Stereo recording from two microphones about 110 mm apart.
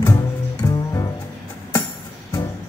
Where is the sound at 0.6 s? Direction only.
25° left (ahead or behind).